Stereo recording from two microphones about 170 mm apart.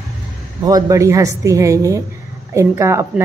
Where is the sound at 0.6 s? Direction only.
20° right (ahead or behind).